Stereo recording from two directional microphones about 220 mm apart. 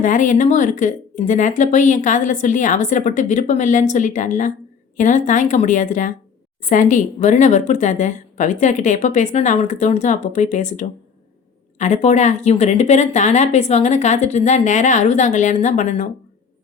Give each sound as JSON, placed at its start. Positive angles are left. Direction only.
{"t": 0.0, "sound": "speech", "side_deg": 35}